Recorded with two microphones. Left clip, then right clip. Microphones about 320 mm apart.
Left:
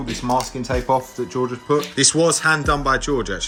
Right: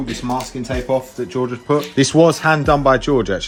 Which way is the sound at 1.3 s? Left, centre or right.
Centre.